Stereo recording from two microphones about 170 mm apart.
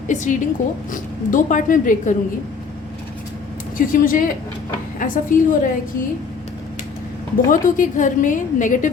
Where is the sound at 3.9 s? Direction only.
50° left (ahead or behind).